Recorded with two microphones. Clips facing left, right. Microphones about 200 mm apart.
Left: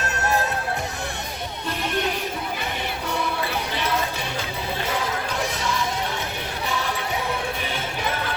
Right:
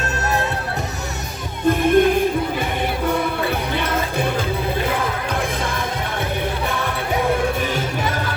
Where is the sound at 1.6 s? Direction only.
50° right (ahead or behind).